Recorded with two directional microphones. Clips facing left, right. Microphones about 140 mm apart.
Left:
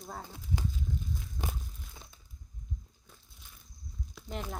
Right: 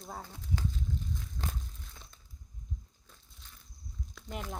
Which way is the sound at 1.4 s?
10° left (ahead or behind).